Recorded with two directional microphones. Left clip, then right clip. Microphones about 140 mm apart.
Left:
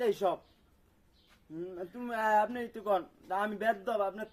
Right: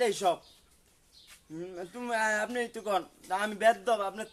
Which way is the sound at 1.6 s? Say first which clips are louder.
Right 1 dB; 25° right (ahead or behind).